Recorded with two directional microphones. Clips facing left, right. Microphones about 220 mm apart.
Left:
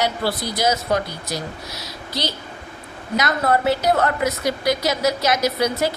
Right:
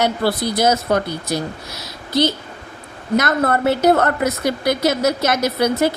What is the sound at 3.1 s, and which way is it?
A woman's voice, 50° right (ahead or behind).